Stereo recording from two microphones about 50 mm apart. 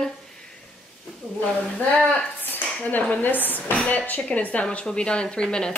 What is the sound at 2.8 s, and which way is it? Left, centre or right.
A woman's voice, left.